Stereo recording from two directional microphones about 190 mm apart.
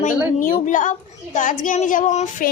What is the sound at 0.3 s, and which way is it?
A woman's voice, 45° left (ahead or behind).